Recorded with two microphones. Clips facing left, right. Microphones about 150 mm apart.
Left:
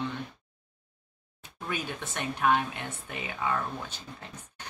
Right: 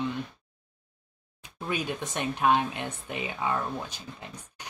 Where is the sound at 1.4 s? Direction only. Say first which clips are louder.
Right 4 dB; 15° right (ahead or behind).